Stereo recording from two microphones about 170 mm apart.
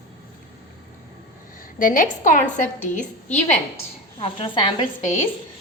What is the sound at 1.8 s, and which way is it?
Speech, 50° left (ahead or behind).